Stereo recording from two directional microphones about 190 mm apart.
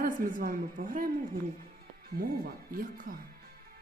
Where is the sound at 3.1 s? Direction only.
45° right (ahead or behind).